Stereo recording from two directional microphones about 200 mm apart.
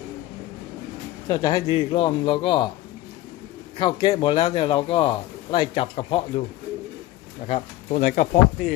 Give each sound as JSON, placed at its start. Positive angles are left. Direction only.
{"t": 1.3, "sound": "speech", "side_deg": 20}
{"t": 3.8, "sound": "speech", "side_deg": 25}
{"t": 7.4, "sound": "speech", "side_deg": 35}